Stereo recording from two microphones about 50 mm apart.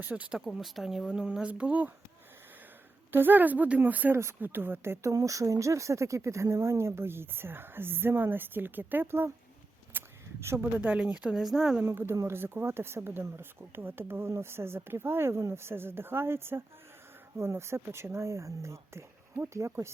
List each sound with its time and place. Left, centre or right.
0.0 s a woman's voice: right
0.3 s speech: centre
1.1 s speech: centre
3.1 s a woman's voice: right
4.1 s speech: right
4.4 s speech: right
5.2 s speech: right
9.0 s speech: right
9.9 s a sound: right
10.6 s a woman's voice: right
11.3 s speech: centre
12.3 s speech: right